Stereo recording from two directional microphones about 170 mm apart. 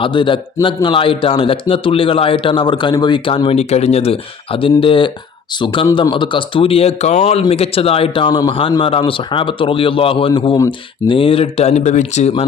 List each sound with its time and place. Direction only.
0.0 s speech: 30° left (ahead or behind)